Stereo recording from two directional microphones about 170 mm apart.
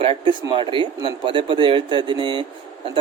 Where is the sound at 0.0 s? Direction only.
30° right (ahead or behind).